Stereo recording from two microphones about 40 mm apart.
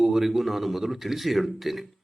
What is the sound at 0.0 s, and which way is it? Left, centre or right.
A man's voice, centre.